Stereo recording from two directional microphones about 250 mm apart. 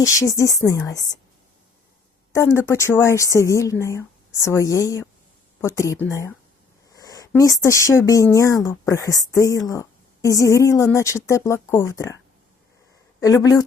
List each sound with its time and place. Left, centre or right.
0.0 s speech: centre
2.3 s speech: centre